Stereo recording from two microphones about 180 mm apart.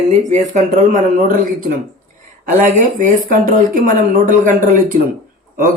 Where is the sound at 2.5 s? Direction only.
45° right (ahead or behind).